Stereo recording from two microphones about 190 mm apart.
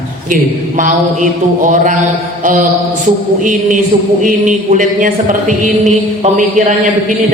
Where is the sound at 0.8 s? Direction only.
45° right (ahead or behind).